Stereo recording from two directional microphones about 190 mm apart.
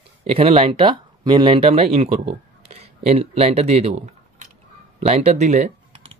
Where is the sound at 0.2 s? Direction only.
30° right (ahead or behind).